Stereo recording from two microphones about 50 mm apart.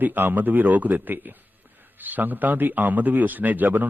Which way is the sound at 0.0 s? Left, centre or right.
Right.